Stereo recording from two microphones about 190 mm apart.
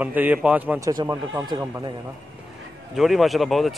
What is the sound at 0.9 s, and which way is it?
Speech, 20° right (ahead or behind).